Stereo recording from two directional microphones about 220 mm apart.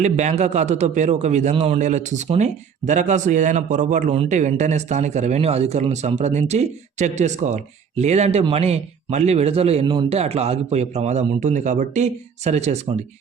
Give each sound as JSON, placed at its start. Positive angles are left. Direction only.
{"t": 0.0, "sound": "a man's voice", "side_deg": -30}